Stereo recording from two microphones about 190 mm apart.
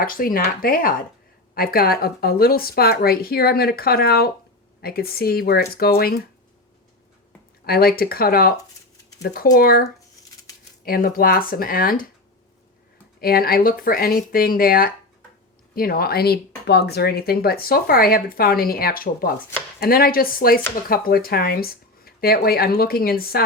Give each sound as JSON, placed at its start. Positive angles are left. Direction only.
{"t": 0.0, "sound": "speech", "side_deg": 50}
{"t": 7.6, "sound": "speech", "side_deg": 50}
{"t": 10.8, "sound": "speech", "side_deg": 50}
{"t": 13.1, "sound": "speech", "side_deg": 50}